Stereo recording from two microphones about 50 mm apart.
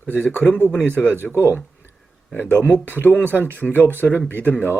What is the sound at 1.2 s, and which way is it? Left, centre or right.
Speech, left.